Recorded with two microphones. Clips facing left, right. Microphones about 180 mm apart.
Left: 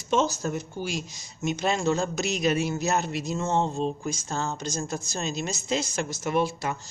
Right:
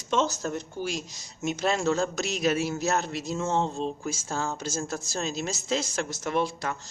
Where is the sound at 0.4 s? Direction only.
5° left (ahead or behind).